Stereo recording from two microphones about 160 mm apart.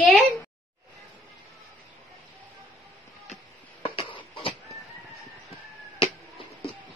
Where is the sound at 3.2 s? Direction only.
40° left (ahead or behind).